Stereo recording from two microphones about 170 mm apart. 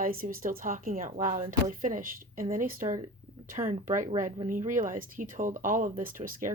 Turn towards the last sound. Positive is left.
turn(degrees=-55)  # may be behind; listen again after turning